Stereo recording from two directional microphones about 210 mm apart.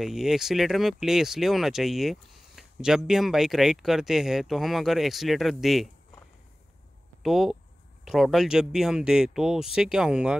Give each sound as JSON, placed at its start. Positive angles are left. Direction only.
{"t": 0.0, "sound": "speech", "side_deg": 0}
{"t": 7.2, "sound": "speech", "side_deg": 0}